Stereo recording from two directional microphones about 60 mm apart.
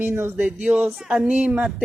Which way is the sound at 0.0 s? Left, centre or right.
Right.